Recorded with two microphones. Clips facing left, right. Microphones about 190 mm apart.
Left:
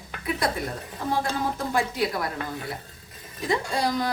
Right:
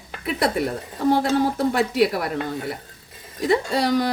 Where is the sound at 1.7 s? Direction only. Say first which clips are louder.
Right 4 dB; 70° right (ahead or behind).